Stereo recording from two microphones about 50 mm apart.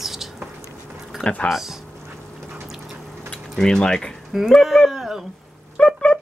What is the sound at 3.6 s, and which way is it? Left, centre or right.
Speech, centre.